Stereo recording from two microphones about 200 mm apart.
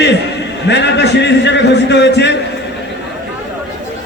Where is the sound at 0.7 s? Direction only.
60° left (ahead or behind).